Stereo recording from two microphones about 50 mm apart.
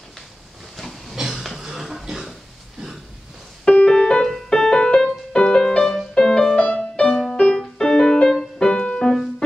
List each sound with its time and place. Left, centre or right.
0.7 s train: centre
1.1 s a sound: centre
1.6 s music: centre
3.6 s music: centre
6.5 s music: left
7.1 s music: centre